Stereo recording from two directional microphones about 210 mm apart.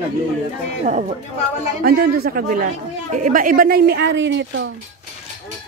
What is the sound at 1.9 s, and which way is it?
A woman's voice, 45° right (ahead or behind).